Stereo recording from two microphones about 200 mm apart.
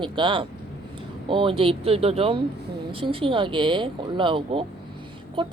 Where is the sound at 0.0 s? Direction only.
25° right (ahead or behind).